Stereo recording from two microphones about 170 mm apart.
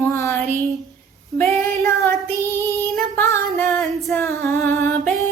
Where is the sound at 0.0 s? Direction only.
15° left (ahead or behind).